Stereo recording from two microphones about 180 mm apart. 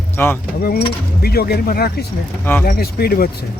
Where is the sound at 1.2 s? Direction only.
60° left (ahead or behind).